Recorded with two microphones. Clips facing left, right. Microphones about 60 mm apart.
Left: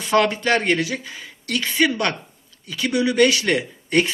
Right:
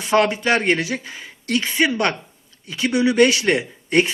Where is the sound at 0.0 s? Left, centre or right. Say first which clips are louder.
Right 1 dB; centre.